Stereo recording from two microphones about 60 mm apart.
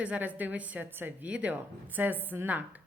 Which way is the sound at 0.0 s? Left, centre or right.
Right.